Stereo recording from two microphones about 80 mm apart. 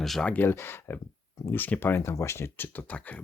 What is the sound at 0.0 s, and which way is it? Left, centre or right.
Speech, centre.